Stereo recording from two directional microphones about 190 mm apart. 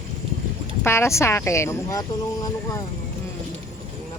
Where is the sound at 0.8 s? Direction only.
15° left (ahead or behind).